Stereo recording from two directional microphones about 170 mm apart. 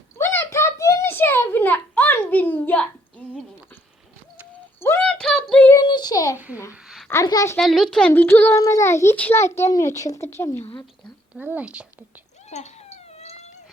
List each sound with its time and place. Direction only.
0.2 s a sound: 15° left (ahead or behind)
4.8 s a sound: 10° left (ahead or behind)
5.7 s child singing: 25° left (ahead or behind)
6.3 s a child's voice: 10° right (ahead or behind)
6.8 s a sound: centre (ahead or behind)
7.1 s a woman's voice: 20° left (ahead or behind)
7.5 s a child's voice: centre (ahead or behind)
10.6 s a woman's voice: 30° left (ahead or behind)
11.3 s a woman's voice: 10° right (ahead or behind)
12.5 s cat: 40° left (ahead or behind)